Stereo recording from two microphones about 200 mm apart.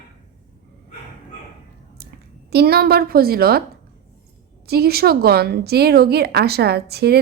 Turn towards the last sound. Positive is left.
turn(degrees=-55)  # may be behind; listen again after turning